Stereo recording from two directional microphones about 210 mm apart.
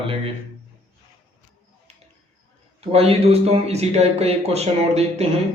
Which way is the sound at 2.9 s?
30° right (ahead or behind).